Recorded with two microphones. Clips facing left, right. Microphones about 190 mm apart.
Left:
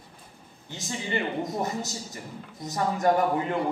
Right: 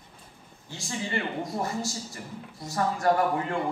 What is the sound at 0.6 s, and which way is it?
A man's voice, 20° left (ahead or behind).